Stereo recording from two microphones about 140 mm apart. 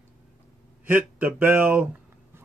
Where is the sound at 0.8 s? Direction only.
15° right (ahead or behind).